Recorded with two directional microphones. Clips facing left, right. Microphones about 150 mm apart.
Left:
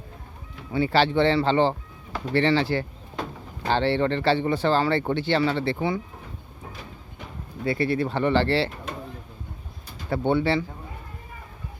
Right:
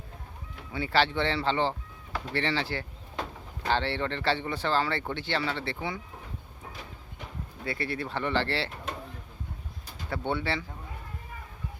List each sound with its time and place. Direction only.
0.7 s speech: 30° left (ahead or behind)
7.6 s speech: 30° left (ahead or behind)
10.1 s speech: 30° left (ahead or behind)